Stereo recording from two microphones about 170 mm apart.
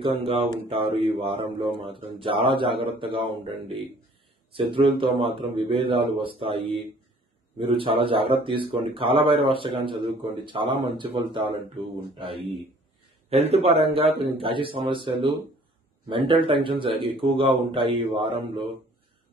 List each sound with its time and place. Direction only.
0.0 s speech: 30° right (ahead or behind)
4.5 s speech: 30° right (ahead or behind)